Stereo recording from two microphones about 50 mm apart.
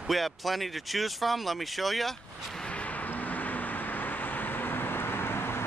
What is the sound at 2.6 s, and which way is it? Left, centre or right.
Vehicle, left.